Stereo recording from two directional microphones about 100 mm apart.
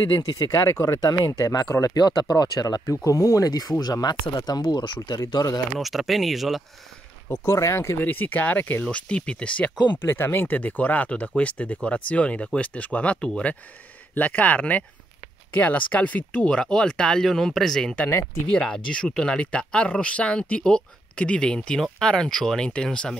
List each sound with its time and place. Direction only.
0.2 s speech: 40° left (ahead or behind)
0.7 s speech: 30° left (ahead or behind)
5.8 s speech: centre (ahead or behind)
7.2 s speech: 30° left (ahead or behind); by 9.9 s 10° left (ahead or behind)
10.0 s speech: 25° left (ahead or behind); by 18.0 s 5° left (ahead or behind)
18.0 s speech: 25° left (ahead or behind)
18.9 s speech: 10° left (ahead or behind)